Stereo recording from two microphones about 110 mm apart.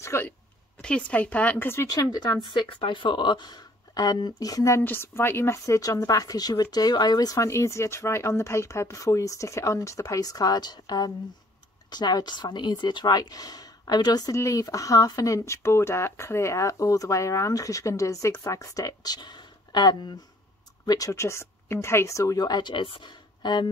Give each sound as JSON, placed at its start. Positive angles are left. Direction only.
{"t": 0.0, "sound": "a sound", "side_deg": 25}
{"t": 0.7, "sound": "speech", "side_deg": 10}
{"t": 2.0, "sound": "speech", "side_deg": 40}
{"t": 4.8, "sound": "a woman's voice", "side_deg": 20}